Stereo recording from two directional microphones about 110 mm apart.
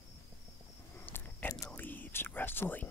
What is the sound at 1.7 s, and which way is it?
Whispering, 15° left (ahead or behind).